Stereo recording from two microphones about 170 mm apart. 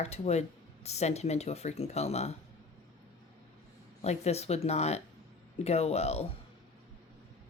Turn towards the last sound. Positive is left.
turn(degrees=40)  # may be behind; listen again after turning